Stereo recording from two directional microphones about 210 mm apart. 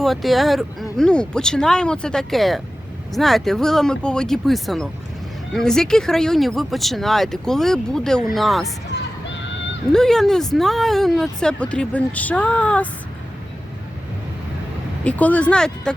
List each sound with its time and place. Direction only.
0.0 s speech: centre (ahead or behind)
9.2 s a sound: 60° left (ahead or behind)
9.9 s speech: centre (ahead or behind)
15.0 s speech: 5° left (ahead or behind)